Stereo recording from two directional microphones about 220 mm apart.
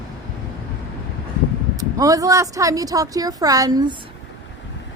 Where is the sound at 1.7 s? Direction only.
15° right (ahead or behind).